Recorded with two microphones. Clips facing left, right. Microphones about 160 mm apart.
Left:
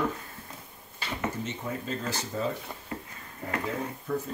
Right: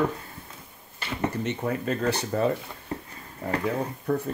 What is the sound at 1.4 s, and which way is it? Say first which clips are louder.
Speech: right 7 dB; 65° right (ahead or behind).